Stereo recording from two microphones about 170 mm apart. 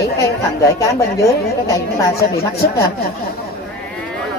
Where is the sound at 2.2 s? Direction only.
70° left (ahead or behind).